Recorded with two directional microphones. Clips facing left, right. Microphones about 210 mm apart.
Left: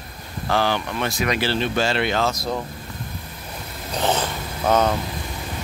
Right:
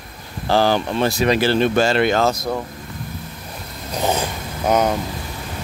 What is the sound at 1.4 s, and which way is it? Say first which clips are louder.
Speech: right 5 dB; 50° right (ahead or behind).